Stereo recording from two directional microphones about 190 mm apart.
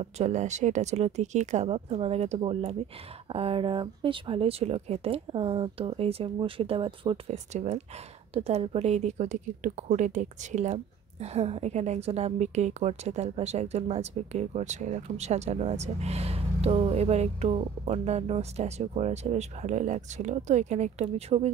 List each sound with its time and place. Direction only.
0.0 s a woman's voice: 40° right (ahead or behind)